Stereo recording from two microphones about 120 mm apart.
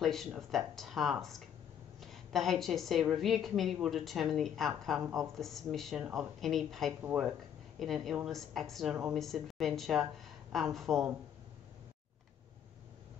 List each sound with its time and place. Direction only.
0.0 s a woman's voice: centre (ahead or behind)
6.9 s speech: 15° right (ahead or behind)
7.8 s a woman's voice: centre (ahead or behind)